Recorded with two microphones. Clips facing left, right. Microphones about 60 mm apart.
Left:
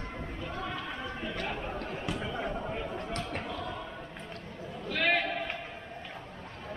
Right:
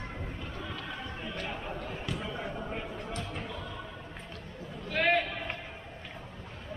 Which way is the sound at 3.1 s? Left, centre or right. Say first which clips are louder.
Left 2 dB; left.